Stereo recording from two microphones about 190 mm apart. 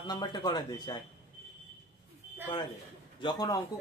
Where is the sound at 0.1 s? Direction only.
20° left (ahead or behind).